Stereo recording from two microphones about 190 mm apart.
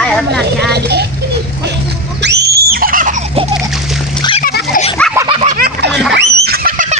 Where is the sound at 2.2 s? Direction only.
60° right (ahead or behind); by 3.2 s 45° right (ahead or behind).